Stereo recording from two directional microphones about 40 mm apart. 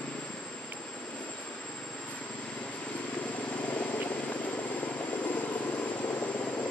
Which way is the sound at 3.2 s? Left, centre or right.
Left.